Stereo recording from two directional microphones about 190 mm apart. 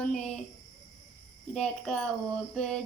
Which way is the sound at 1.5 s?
5° left (ahead or behind).